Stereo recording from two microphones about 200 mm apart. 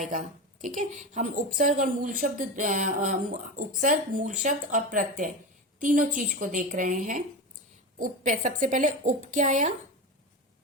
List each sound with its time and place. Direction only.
0.1 s a woman's voice: 40° right (ahead or behind)